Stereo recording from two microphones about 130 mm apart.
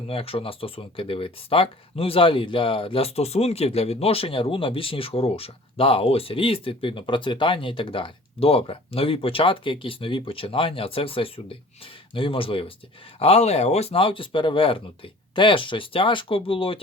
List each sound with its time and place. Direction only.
0.1 s speech: 45° left (ahead or behind)